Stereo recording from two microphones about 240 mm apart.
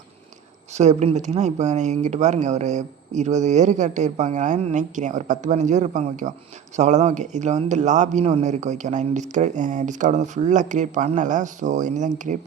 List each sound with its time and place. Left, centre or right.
0.7 s speech: right